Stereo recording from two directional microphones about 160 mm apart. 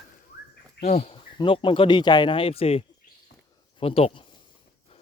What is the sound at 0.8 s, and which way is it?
Speech, 45° left (ahead or behind).